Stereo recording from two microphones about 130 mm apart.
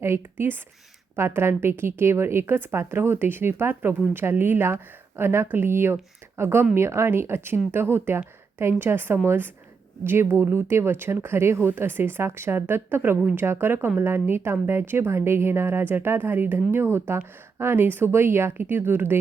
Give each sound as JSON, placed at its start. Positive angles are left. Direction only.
{"t": 0.0, "sound": "speech", "side_deg": -20}